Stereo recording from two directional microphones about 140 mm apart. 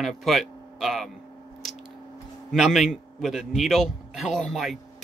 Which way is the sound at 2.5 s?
Centre (ahead or behind).